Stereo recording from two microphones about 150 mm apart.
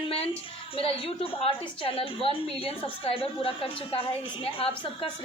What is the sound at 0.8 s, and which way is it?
A woman's voice, 40° left (ahead or behind).